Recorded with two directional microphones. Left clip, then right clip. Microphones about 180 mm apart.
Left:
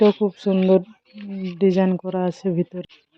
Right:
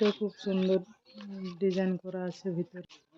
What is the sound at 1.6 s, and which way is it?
Speech, 40° left (ahead or behind).